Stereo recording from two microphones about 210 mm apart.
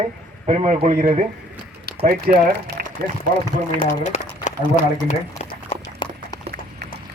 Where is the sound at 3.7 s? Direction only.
35° left (ahead or behind).